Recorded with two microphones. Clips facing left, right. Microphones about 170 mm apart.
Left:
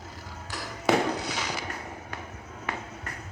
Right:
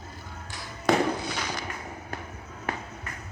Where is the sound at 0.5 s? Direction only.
80° left.